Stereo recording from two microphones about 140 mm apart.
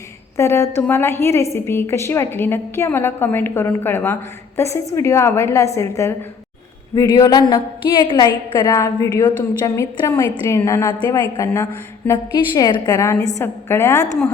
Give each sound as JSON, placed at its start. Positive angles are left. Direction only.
{"t": 0.3, "sound": "a woman's voice", "side_deg": 20}
{"t": 13.4, "sound": "a woman's voice", "side_deg": 15}